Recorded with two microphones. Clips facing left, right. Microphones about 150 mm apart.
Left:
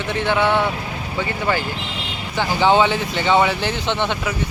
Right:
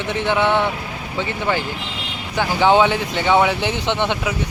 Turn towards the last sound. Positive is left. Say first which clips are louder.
# right 1 dB
turn(degrees=-15)  # may be behind; listen again after turning